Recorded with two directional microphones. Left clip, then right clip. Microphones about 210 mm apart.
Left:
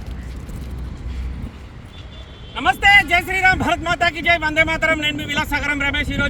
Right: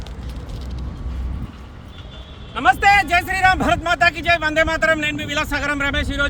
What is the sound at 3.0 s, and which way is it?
Speech, 30° right (ahead or behind).